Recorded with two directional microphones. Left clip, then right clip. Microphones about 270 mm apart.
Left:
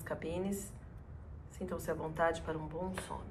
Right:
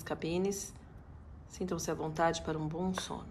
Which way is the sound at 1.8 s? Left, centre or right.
Right.